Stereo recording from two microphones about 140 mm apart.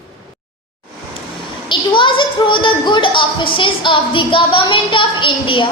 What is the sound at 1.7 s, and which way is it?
Speech, 35° left (ahead or behind).